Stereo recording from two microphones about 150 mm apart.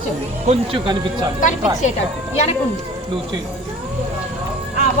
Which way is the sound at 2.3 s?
45° left (ahead or behind).